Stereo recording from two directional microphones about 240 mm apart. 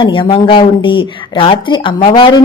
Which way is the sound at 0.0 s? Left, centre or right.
Left.